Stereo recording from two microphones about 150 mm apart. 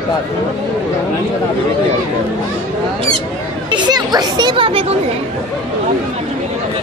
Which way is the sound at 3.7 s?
30° right (ahead or behind).